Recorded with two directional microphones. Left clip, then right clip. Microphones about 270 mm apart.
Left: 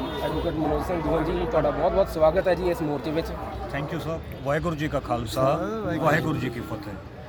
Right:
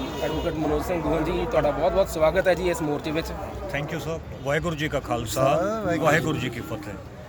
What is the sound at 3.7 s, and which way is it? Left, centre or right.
Speech, centre.